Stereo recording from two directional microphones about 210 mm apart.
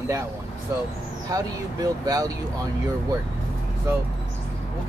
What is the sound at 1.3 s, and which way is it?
Speech, 15° right (ahead or behind).